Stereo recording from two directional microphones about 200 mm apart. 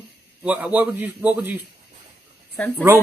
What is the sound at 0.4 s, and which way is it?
A man's voice, 5° right (ahead or behind).